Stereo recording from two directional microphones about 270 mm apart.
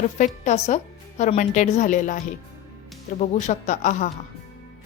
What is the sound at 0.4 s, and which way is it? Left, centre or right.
Speech, left.